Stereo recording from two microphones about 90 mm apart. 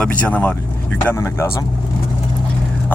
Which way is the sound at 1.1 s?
30° left (ahead or behind).